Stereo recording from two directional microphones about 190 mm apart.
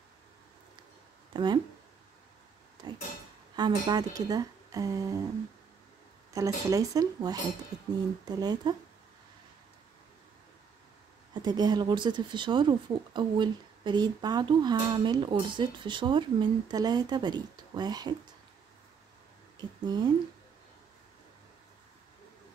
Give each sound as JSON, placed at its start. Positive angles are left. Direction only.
{"t": 1.3, "sound": "speech", "side_deg": -25}
{"t": 3.5, "sound": "speech", "side_deg": -20}
{"t": 6.3, "sound": "speech", "side_deg": -15}
{"t": 7.7, "sound": "cutlery", "side_deg": -20}
{"t": 8.3, "sound": "speech", "side_deg": -20}
{"t": 11.4, "sound": "speech", "side_deg": -20}
{"t": 19.6, "sound": "speech", "side_deg": -20}